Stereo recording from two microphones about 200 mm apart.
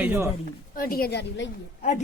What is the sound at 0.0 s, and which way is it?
Speech, 10° right (ahead or behind).